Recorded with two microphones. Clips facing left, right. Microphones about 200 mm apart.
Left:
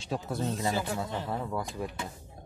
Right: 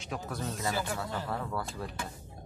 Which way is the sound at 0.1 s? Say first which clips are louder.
Left 5 dB; 25° left (ahead or behind).